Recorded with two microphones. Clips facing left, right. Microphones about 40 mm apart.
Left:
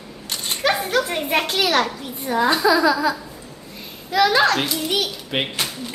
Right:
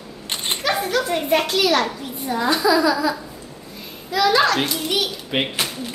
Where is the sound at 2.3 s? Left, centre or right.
Left.